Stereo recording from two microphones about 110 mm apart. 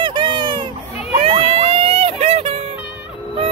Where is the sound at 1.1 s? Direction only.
65° right (ahead or behind).